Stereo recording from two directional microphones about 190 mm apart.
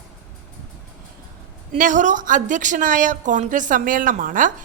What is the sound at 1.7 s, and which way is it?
A woman's voice, 40° right (ahead or behind).